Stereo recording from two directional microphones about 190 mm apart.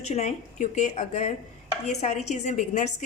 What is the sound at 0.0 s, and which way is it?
A woman's voice, 35° left (ahead or behind).